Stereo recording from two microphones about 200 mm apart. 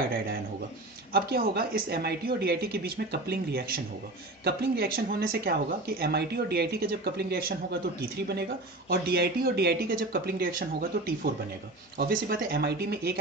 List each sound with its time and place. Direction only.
1.1 s speech: 50° right (ahead or behind)